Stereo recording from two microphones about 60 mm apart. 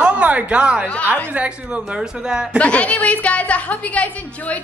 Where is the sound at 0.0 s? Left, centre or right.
Right.